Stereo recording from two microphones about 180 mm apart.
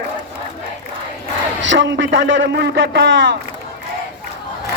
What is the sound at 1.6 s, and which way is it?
Speech, 90° right.